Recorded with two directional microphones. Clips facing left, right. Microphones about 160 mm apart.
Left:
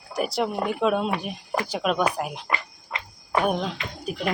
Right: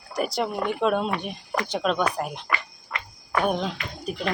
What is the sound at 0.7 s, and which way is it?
Speech, centre (ahead or behind).